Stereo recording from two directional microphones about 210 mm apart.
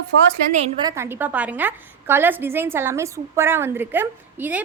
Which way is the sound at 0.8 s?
15° right (ahead or behind).